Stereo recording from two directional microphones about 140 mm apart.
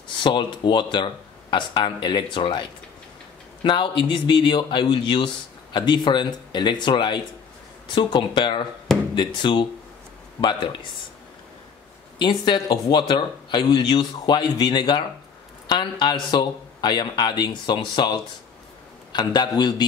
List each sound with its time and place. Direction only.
0.2 s a man's voice: 35° left (ahead or behind)
3.6 s a man's voice: 35° left (ahead or behind)
8.9 s a sound: 5° left (ahead or behind)
9.4 s a man's voice: 35° left (ahead or behind)
12.2 s a man's voice: 35° left (ahead or behind)